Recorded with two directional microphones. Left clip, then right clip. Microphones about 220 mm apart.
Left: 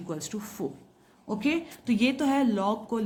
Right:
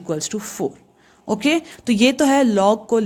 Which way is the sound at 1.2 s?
50° right (ahead or behind).